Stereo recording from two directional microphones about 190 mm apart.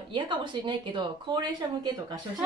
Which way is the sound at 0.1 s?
25° right (ahead or behind).